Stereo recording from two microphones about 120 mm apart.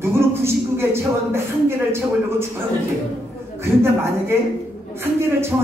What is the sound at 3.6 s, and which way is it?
Speech, 20° right (ahead or behind).